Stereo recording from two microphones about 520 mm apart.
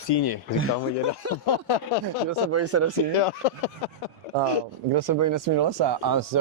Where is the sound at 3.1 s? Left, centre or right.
Left.